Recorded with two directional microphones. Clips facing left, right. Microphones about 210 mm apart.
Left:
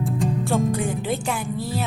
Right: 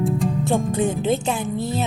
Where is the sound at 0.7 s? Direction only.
20° right (ahead or behind).